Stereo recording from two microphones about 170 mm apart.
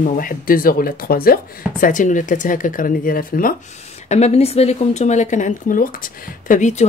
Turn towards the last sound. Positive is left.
turn(degrees=45)  # may be behind; listen again after turning